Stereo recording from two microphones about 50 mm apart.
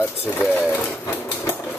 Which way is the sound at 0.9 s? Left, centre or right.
Left.